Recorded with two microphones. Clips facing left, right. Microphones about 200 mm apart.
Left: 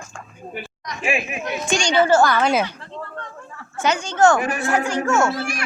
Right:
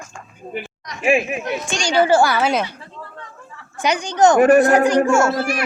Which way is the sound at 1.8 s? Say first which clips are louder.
Right 2 dB; 10° right (ahead or behind).